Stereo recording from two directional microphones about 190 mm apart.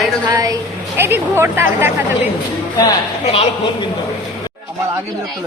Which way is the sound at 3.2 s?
30° left (ahead or behind).